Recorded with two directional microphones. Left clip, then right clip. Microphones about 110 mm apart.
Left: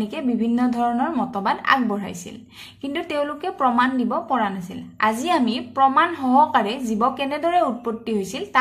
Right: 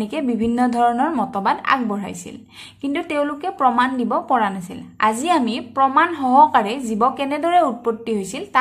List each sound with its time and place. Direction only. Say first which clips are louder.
0.2 s a woman's voice: right 3 dB; 40° right (ahead or behind); by 8.5 s 20° right (ahead or behind)